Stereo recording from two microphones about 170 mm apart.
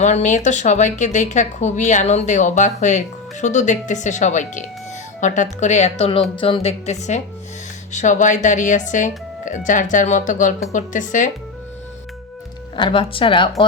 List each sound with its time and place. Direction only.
0.0 s a woman's voice: 45° left (ahead or behind)
12.7 s a woman's voice: 30° left (ahead or behind)